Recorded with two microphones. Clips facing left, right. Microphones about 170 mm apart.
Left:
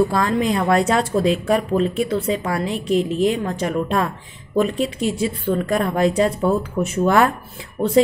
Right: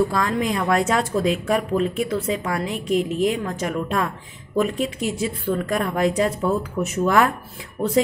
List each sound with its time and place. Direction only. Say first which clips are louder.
0.1 s a woman's voice: left 3 dB; 30° left (ahead or behind)